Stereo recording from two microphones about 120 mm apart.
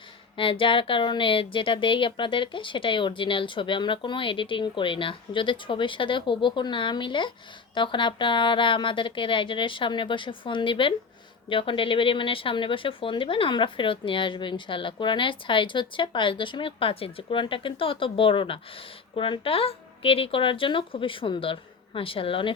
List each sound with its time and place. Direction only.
0.3 s speech: 45° left (ahead or behind)